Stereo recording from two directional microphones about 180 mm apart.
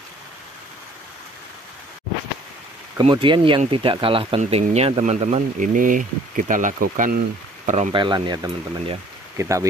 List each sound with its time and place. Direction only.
3.0 s speech: 25° right (ahead or behind); by 7.7 s 50° right (ahead or behind)
7.9 s speech: 25° right (ahead or behind)